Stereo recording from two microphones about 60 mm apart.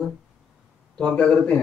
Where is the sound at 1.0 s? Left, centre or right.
Centre.